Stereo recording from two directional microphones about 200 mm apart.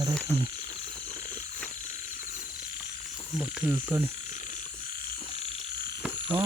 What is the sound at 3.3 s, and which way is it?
Speech, centre (ahead or behind).